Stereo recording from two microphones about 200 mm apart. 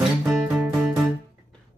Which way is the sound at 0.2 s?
10° right (ahead or behind).